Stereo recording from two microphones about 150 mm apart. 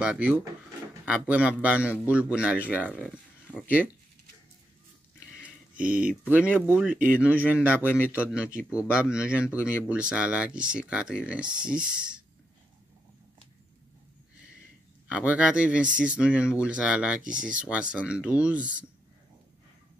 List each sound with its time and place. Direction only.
0.0 s a man's voice: 10° right (ahead or behind)
5.4 s a man's voice: 10° right (ahead or behind)
15.0 s a man's voice: 10° right (ahead or behind)